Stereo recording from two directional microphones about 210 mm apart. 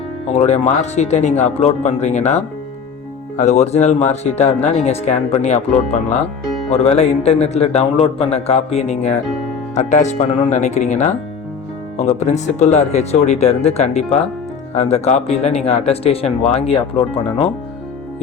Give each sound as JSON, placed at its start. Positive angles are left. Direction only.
{"t": 0.3, "sound": "speech", "side_deg": 30}